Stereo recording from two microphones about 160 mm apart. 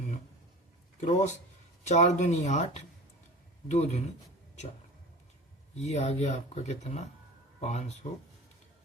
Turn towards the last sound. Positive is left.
turn(degrees=45)  # may be behind; listen again after turning